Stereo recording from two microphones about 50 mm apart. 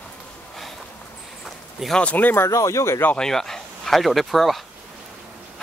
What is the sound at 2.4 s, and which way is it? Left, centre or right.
Speech, left.